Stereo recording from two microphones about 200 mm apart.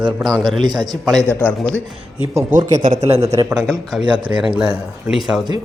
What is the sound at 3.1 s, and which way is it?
Speech, 30° right (ahead or behind).